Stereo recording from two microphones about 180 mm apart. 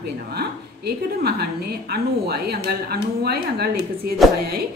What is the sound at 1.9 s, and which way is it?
A woman's voice, 60° right (ahead or behind).